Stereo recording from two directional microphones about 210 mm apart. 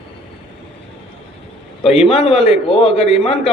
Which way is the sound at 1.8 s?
30° left (ahead or behind).